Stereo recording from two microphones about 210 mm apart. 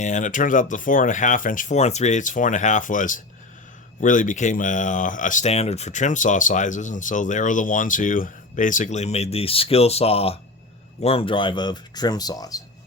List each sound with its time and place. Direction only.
0.0 s speech: 35° left (ahead or behind); by 12.6 s 15° left (ahead or behind)